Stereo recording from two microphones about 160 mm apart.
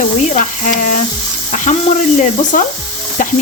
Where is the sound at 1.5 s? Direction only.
50° left (ahead or behind).